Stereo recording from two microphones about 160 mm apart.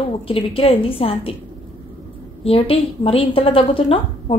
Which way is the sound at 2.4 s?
35° left (ahead or behind).